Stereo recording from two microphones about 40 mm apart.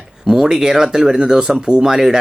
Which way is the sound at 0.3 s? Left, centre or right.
Centre.